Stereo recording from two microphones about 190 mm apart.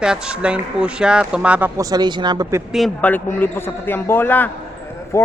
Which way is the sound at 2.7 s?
Centre (ahead or behind).